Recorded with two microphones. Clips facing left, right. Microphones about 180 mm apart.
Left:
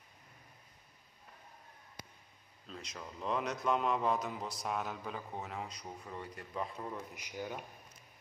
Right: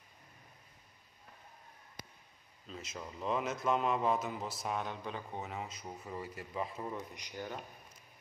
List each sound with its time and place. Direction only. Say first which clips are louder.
2.7 s speech: right 2 dB; 5° right (ahead or behind)